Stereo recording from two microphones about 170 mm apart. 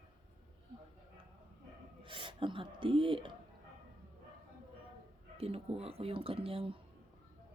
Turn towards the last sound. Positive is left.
turn(degrees=-35)  # may be behind; listen again after turning